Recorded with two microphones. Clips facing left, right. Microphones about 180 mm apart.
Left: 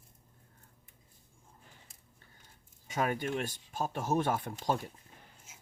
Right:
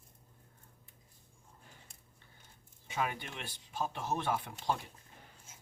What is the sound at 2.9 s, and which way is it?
Speech, 45° left (ahead or behind).